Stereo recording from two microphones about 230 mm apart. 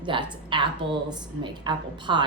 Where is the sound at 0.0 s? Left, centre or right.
Right.